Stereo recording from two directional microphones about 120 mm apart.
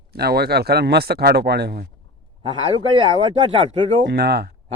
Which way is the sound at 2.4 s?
50° right (ahead or behind).